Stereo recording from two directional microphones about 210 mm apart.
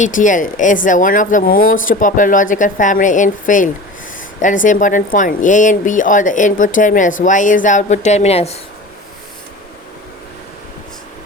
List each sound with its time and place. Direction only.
0.0 s speech: 40° left (ahead or behind)